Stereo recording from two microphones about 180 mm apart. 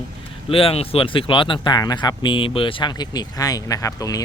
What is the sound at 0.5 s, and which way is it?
Speech, 35° left (ahead or behind).